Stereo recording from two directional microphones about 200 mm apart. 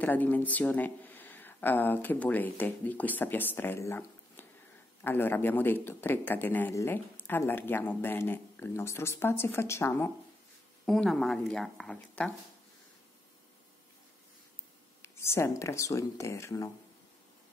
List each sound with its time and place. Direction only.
0.0 s speech: 10° left (ahead or behind)
10.9 s speech: centre (ahead or behind)
15.0 s speech: 15° left (ahead or behind)